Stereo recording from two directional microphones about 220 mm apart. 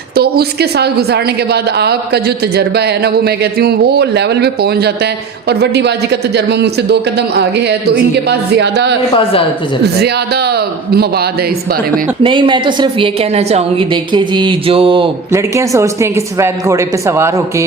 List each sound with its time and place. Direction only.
0.2 s a woman's voice: 45° right (ahead or behind)
12.2 s a woman's voice: 20° right (ahead or behind)
15.3 s speech: 15° right (ahead or behind)